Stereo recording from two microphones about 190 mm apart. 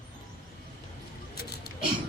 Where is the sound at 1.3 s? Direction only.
55° left (ahead or behind).